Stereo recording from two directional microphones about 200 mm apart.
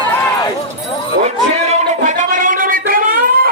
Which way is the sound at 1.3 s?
35° right (ahead or behind).